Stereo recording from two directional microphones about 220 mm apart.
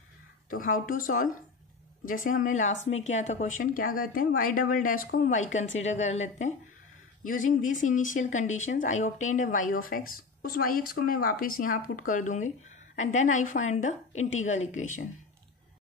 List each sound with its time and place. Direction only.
0.5 s speech: 40° left (ahead or behind)